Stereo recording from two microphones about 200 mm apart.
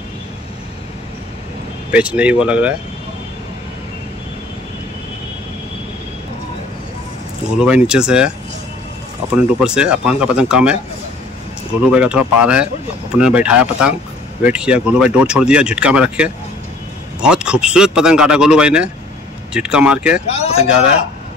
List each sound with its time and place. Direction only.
1.9 s speech: 5° right (ahead or behind)
7.5 s speech: 5° right (ahead or behind)
9.3 s speech: 5° right (ahead or behind)
11.8 s speech: 5° right (ahead or behind)
20.3 s speech: 30° left (ahead or behind)